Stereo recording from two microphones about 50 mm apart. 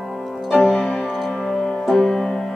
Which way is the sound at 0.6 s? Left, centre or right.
Centre.